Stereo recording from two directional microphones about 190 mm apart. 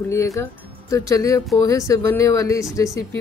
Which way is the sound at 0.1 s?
15° left (ahead or behind).